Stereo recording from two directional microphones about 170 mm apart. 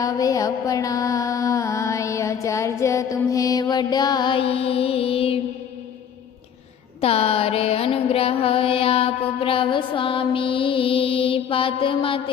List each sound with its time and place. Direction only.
0.0 s mantra: 20° left (ahead or behind)
7.0 s music: 35° left (ahead or behind)